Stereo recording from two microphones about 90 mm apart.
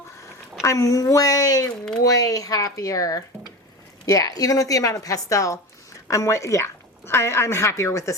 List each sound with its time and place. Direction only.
0.6 s a woman's voice: 35° left (ahead or behind)